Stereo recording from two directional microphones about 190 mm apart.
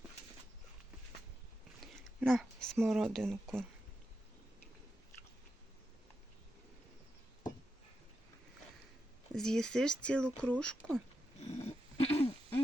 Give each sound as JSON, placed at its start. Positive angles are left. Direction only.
{"t": 2.2, "sound": "speech", "side_deg": 0}
{"t": 9.3, "sound": "speech", "side_deg": 0}
{"t": 11.4, "sound": "dog", "side_deg": 30}